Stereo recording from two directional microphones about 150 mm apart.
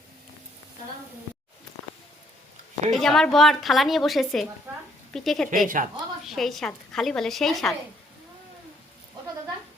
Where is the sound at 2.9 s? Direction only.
Centre (ahead or behind).